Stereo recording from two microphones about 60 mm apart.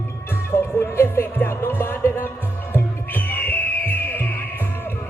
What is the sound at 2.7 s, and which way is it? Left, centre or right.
Music, left.